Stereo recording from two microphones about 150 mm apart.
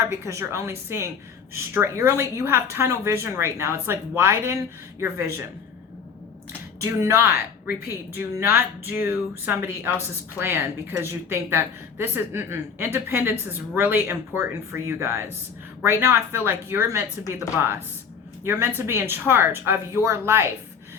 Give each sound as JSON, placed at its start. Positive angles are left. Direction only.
{"t": 0.1, "sound": "a woman's voice", "side_deg": -20}
{"t": 6.8, "sound": "a woman's voice", "side_deg": -20}
{"t": 18.4, "sound": "a woman's voice", "side_deg": -15}